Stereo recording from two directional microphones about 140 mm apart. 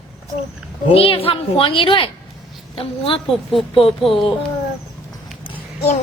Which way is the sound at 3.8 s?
40° left (ahead or behind).